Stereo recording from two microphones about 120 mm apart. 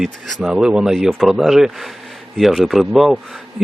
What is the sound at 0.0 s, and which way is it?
Speech, 5° right (ahead or behind).